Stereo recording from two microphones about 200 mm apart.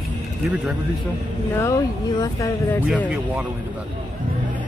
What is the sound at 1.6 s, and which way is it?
Speech, 15° left (ahead or behind).